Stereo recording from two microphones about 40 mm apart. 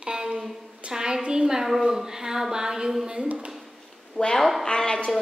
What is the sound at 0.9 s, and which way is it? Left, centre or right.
A woman's voice, centre.